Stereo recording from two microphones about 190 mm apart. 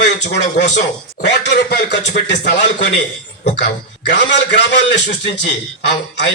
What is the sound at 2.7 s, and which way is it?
A man's voice, 65° left (ahead or behind).